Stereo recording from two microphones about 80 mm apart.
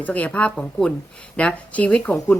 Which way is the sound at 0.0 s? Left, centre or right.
Centre.